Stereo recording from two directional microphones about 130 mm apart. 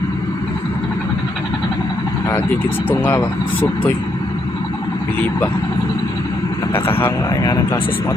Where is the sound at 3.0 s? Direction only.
20° left (ahead or behind).